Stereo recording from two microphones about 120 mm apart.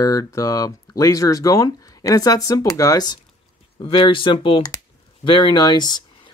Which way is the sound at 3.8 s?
40° left (ahead or behind).